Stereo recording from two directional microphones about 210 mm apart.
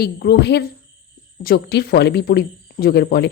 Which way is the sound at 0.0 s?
50° left (ahead or behind).